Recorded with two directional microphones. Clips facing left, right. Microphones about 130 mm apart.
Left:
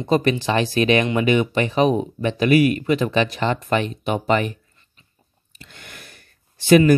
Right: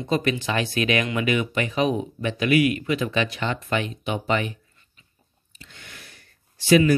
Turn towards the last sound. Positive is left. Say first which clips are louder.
# left 4 dB
turn(degrees=50)  # may be behind; listen again after turning